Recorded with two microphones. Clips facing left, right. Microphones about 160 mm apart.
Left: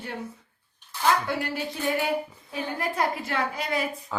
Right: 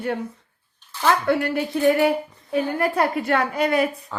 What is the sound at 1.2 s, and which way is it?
A woman's voice, 60° right (ahead or behind).